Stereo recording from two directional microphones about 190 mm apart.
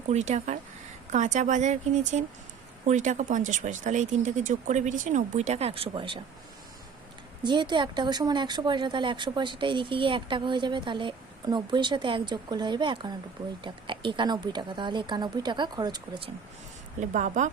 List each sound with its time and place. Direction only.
0.1 s speech: 35° right (ahead or behind)
7.4 s speech: 25° right (ahead or behind)
17.0 s speech: 40° right (ahead or behind)